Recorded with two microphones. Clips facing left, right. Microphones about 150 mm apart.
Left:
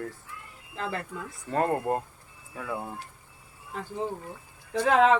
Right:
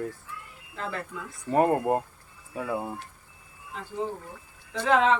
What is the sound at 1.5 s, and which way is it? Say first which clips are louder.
Speech: right 4 dB; 15° right (ahead or behind).